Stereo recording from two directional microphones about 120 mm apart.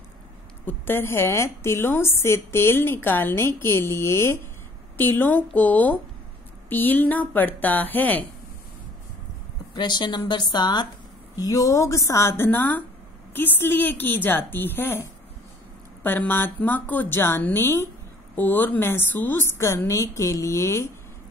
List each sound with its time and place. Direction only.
0.7 s a woman's voice: 20° left (ahead or behind)
9.8 s a woman's voice: 35° left (ahead or behind)